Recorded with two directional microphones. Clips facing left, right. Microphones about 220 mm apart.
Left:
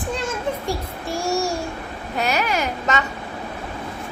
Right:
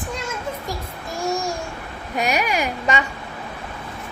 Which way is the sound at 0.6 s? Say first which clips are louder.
Left 4 dB; 75° left (ahead or behind).